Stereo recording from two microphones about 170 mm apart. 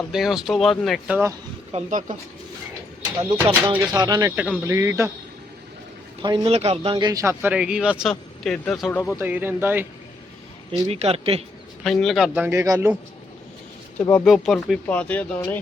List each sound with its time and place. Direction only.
0.1 s speech: centre (ahead or behind)
1.7 s speech: 45° right (ahead or behind)
3.8 s speech: 20° right (ahead or behind)
4.3 s speech: 10° right (ahead or behind)
6.2 s speech: 30° right (ahead or behind); by 8.1 s 5° right (ahead or behind)
8.1 s speech: 5° left (ahead or behind)
9.1 s speech: 10° right (ahead or behind)
10.7 s speech: 35° right (ahead or behind)
11.8 s speech: centre (ahead or behind)
12.3 s speech: 15° right (ahead or behind)
14.0 s speech: 10° left (ahead or behind)